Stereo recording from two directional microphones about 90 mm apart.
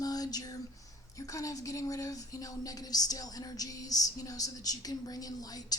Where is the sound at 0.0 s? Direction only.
45° left (ahead or behind).